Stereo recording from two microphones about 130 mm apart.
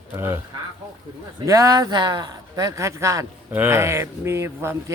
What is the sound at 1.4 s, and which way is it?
A man's voice, 25° right (ahead or behind).